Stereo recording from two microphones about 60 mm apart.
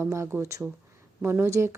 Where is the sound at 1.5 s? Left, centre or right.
Right.